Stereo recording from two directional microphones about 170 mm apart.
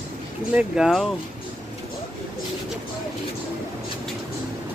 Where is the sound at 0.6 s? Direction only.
5° right (ahead or behind).